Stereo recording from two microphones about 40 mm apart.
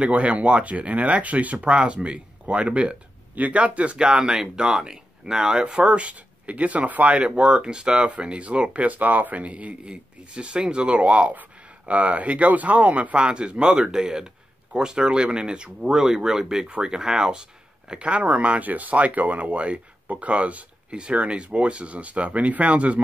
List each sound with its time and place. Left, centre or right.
0.0 s speech: right
4.1 s speech: centre
5.8 s speech: right
8.7 s speech: right
13.1 s speech: right